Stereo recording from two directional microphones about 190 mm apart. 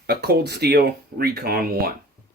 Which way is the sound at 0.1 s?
55° right (ahead or behind).